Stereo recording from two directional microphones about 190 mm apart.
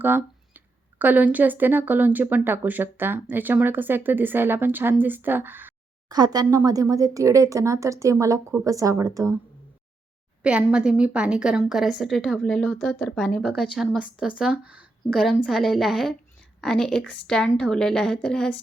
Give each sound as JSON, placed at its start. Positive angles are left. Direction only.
{"t": 0.0, "sound": "speech", "side_deg": -10}
{"t": 6.1, "sound": "speech", "side_deg": -20}
{"t": 10.4, "sound": "a woman's voice", "side_deg": -5}